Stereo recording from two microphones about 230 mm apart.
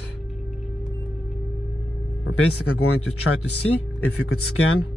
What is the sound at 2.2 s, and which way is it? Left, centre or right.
Speech, left.